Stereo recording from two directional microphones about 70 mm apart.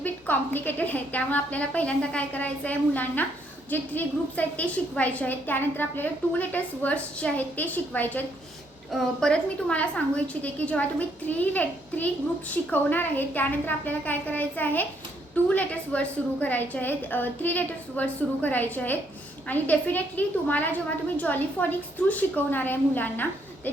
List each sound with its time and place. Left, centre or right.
0.0 s a woman's voice: left
8.9 s a woman's voice: centre
9.3 s a woman's voice: centre